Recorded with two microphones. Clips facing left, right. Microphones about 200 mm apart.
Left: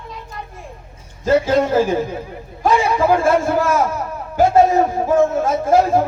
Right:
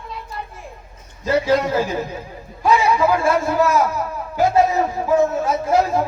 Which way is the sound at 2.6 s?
50° left (ahead or behind).